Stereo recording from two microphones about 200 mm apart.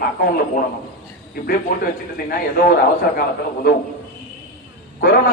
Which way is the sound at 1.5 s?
45° left (ahead or behind).